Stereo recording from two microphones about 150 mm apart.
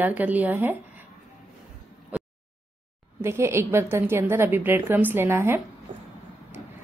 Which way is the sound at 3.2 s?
15° right (ahead or behind).